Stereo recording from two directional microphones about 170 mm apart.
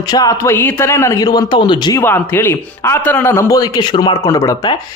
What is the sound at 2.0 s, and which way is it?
A man's voice, 15° left (ahead or behind).